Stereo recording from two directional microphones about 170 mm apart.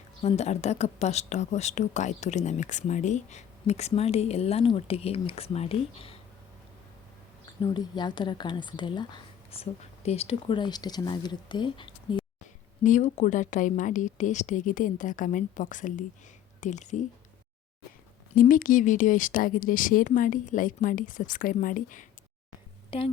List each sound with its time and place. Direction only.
0.2 s speech: 40° left (ahead or behind)
7.6 s speech: 25° left (ahead or behind)
12.8 s speech: 45° left (ahead or behind)
18.3 s speech: 55° left (ahead or behind)